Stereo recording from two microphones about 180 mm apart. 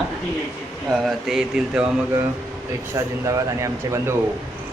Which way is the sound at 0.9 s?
Centre (ahead or behind).